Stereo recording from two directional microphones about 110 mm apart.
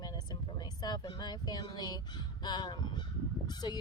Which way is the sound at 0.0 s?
35° left (ahead or behind).